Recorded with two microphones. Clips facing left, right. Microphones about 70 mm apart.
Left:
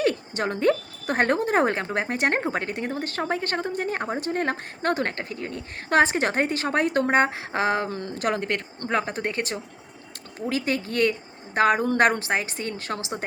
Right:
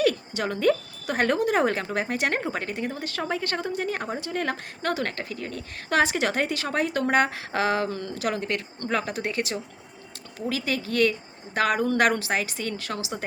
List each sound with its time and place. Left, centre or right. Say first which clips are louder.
0.0 s speech: even; left